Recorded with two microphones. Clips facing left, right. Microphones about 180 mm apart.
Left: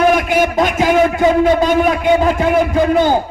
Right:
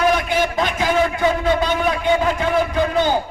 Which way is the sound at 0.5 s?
40° left (ahead or behind).